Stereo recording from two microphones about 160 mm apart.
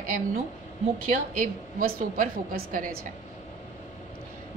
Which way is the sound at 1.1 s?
60° right (ahead or behind).